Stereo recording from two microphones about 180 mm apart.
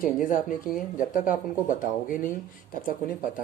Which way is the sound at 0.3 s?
45° left (ahead or behind).